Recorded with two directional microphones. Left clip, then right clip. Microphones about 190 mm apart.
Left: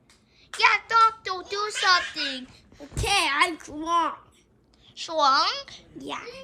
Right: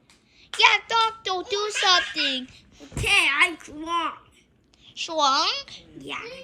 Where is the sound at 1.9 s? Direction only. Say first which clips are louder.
Right 2 dB; 10° right (ahead or behind).